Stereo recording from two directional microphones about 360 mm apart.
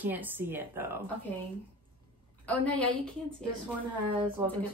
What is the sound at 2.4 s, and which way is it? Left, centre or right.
Speech, centre.